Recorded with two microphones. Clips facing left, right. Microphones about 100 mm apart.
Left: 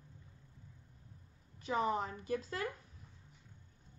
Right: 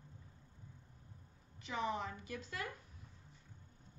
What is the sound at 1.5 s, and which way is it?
A woman's voice, 40° left (ahead or behind).